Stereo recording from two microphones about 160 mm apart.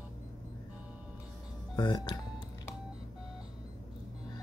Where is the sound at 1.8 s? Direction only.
25° left (ahead or behind).